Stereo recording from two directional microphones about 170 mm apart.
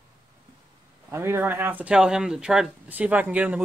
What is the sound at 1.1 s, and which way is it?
Speech, 15° right (ahead or behind).